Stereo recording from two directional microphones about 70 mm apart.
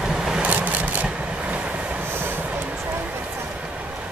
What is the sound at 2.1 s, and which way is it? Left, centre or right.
Train, right.